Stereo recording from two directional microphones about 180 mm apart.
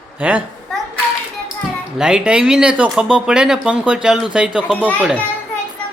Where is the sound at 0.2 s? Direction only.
10° right (ahead or behind).